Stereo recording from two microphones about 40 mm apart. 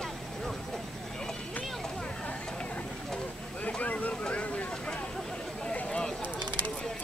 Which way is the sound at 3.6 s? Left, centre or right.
Left.